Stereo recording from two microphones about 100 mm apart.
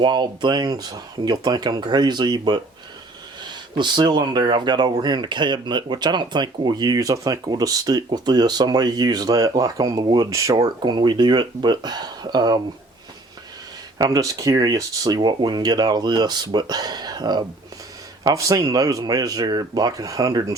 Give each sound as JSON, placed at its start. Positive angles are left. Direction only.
{"t": 0.0, "sound": "speech", "side_deg": -50}
{"t": 10.2, "sound": "speech", "side_deg": -35}
{"t": 14.0, "sound": "speech", "side_deg": -35}
{"t": 18.3, "sound": "speech", "side_deg": -30}